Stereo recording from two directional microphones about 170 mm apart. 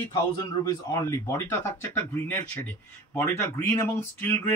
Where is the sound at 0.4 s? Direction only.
20° left (ahead or behind).